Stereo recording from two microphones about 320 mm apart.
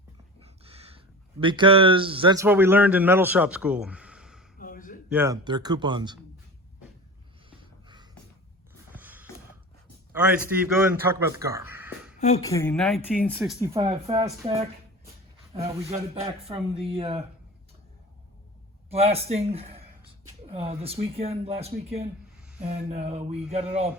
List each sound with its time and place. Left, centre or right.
0.4 s speech: centre
4.5 s a sound: left
5.0 s speech: centre
7.6 s a sound: centre
10.1 s speech: centre
12.2 s speech: centre
13.7 s speech: centre
18.9 s speech: centre